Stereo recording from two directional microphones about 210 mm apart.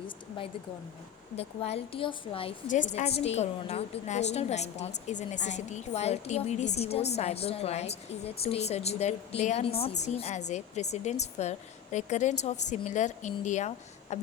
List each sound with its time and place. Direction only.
1.4 s a woman's voice: 30° left (ahead or behind)